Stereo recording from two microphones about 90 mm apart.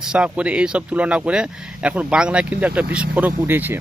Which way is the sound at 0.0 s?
10° right (ahead or behind).